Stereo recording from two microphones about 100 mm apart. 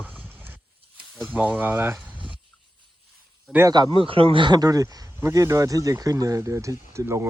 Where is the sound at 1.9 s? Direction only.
15° right (ahead or behind).